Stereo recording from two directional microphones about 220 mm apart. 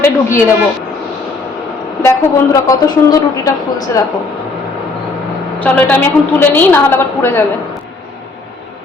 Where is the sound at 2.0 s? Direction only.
15° left (ahead or behind).